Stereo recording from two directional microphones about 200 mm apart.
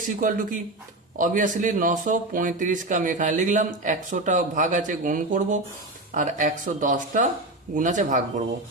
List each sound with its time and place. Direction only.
0.2 s a man's voice: 40° right (ahead or behind)